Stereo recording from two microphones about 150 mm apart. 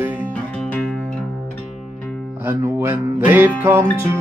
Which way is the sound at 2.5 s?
15° right (ahead or behind).